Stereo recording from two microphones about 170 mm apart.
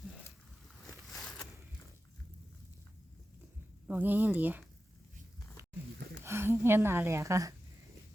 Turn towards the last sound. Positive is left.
turn(degrees=-20)  # may be behind; listen again after turning